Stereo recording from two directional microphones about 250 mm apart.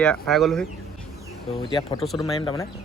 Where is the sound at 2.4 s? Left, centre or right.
Centre.